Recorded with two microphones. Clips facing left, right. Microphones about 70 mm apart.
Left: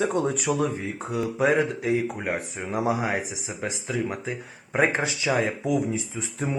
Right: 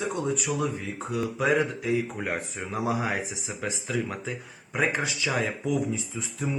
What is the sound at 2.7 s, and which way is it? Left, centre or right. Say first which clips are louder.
Speech: left 3 dB; left.